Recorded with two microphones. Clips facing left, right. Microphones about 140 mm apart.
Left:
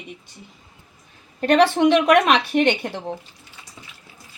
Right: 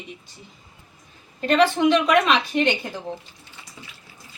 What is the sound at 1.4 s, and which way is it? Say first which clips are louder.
A woman's voice: left 3 dB; 65° left (ahead or behind).